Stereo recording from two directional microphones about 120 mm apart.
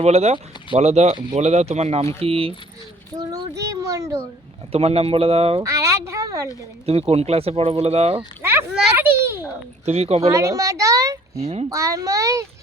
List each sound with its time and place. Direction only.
0.0 s speech: 60° right (ahead or behind)
3.1 s speech: 30° right (ahead or behind)
4.7 s speech: 60° right (ahead or behind)
5.6 s a sound: 25° right (ahead or behind)
6.8 s speech: 55° right (ahead or behind)
8.4 s children playing: 20° right (ahead or behind)
9.8 s speech: 60° right (ahead or behind)
10.2 s a sound: 25° right (ahead or behind)
11.7 s a child's voice: 25° right (ahead or behind)